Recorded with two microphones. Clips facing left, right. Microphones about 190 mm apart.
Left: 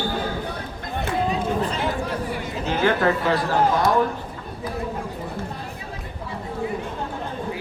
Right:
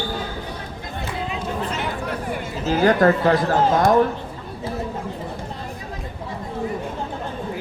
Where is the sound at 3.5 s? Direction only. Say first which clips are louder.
Right 3 dB; 50° right (ahead or behind).